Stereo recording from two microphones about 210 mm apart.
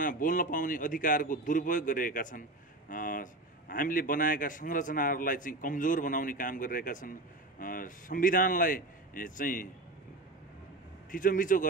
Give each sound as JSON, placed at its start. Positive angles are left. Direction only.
{"t": 0.0, "sound": "a man's voice", "side_deg": 40}
{"t": 11.1, "sound": "a man's voice", "side_deg": 40}